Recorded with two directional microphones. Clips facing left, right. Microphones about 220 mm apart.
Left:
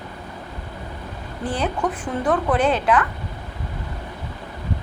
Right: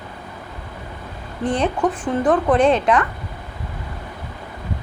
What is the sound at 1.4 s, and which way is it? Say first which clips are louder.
Speech: right 5 dB; 5° left (ahead or behind).